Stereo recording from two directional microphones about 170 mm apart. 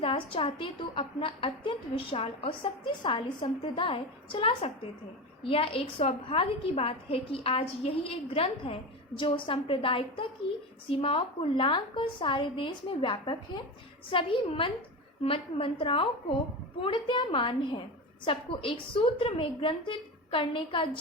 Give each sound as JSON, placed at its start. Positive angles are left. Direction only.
{"t": 0.0, "sound": "a woman's voice", "side_deg": 35}